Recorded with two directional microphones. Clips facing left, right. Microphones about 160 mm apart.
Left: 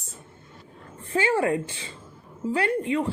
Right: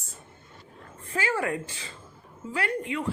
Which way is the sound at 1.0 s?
30° left (ahead or behind).